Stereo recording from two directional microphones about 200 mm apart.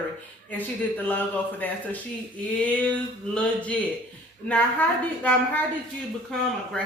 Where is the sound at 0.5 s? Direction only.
10° left (ahead or behind).